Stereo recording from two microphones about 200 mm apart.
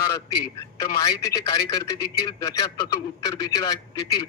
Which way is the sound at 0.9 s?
20° left (ahead or behind).